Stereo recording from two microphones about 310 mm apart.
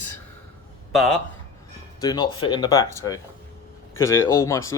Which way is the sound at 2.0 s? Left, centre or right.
Centre.